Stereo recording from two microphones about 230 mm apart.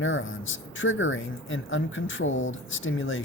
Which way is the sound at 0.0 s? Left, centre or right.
Left.